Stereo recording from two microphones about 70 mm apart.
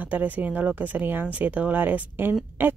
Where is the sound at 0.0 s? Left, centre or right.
Right.